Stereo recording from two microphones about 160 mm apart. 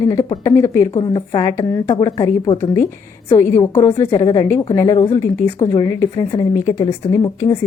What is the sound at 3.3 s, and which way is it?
A woman's voice, 15° left (ahead or behind).